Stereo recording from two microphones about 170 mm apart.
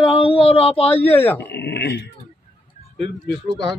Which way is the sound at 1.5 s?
75° left (ahead or behind).